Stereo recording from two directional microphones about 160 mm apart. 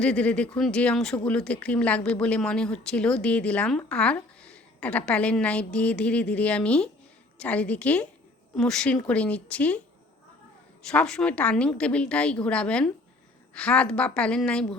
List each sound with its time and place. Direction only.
0.0 s speech: 5° left (ahead or behind)
10.8 s a woman's voice: 5° left (ahead or behind)